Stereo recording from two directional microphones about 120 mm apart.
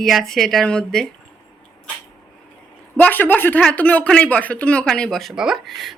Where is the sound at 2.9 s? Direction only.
15° left (ahead or behind).